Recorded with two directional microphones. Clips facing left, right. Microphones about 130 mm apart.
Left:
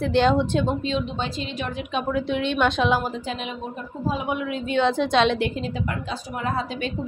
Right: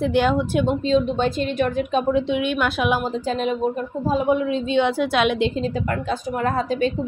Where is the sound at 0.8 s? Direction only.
35° right (ahead or behind).